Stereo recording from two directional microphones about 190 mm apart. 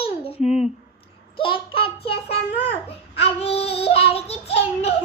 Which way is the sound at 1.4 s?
25° left (ahead or behind).